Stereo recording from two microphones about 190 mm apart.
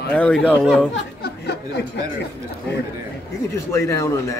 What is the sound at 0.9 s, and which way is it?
Speech, 60° left (ahead or behind).